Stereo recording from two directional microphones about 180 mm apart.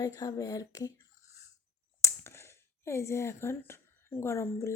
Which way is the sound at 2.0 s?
15° left (ahead or behind).